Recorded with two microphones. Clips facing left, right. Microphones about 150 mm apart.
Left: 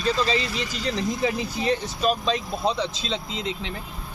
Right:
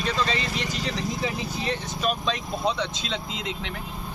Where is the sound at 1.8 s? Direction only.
30° left (ahead or behind).